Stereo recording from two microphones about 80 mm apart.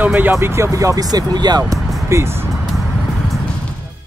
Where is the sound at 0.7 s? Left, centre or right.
Right.